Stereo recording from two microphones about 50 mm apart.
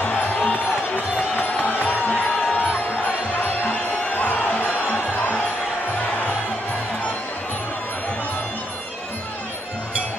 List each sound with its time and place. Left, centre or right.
0.0 s music: left
3.6 s music: left